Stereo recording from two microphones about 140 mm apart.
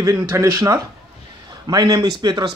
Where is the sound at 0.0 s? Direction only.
20° right (ahead or behind).